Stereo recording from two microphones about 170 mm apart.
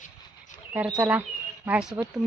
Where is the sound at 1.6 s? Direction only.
5° right (ahead or behind).